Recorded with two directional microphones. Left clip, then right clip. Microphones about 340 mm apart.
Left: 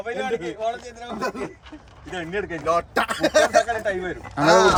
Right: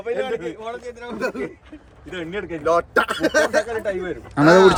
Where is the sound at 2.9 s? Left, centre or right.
Centre.